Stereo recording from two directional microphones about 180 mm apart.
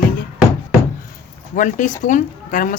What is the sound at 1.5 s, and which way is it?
Speech, 45° left (ahead or behind).